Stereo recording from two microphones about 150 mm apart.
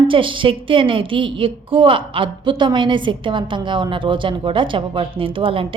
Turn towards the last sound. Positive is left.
turn(degrees=-35)  # may be behind; listen again after turning